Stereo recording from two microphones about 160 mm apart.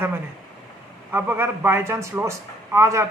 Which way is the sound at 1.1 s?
10° right (ahead or behind).